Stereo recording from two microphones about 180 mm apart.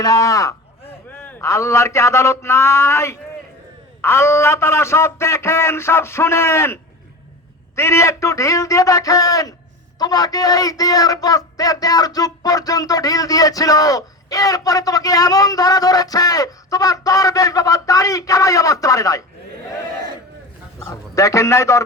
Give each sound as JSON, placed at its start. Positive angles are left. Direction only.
{"t": 0.0, "sound": "speech", "side_deg": 20}
{"t": 7.8, "sound": "speech", "side_deg": 15}
{"t": 20.7, "sound": "a man's voice", "side_deg": 15}